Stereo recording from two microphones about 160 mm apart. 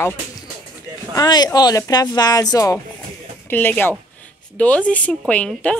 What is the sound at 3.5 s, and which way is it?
A woman's voice, 10° left (ahead or behind).